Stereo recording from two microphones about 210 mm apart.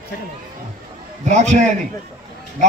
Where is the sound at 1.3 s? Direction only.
35° right (ahead or behind).